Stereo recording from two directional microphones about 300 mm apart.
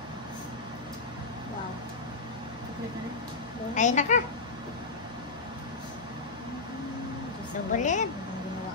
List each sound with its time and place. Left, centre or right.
3.7 s a woman's voice: left
7.7 s a woman's voice: left